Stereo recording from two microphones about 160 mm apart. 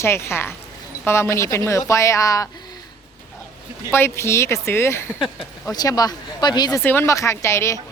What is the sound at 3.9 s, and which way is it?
Speech, 15° left (ahead or behind).